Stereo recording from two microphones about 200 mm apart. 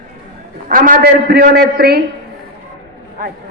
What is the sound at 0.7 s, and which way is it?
A man's voice, 45° right (ahead or behind).